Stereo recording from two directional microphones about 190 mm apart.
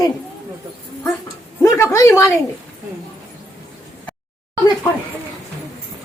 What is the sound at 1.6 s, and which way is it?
Speech, 15° left (ahead or behind).